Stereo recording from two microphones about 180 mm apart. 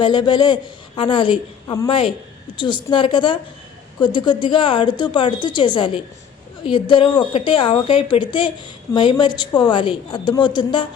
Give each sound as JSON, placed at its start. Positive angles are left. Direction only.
{"t": 0.0, "sound": "a woman's voice", "side_deg": 25}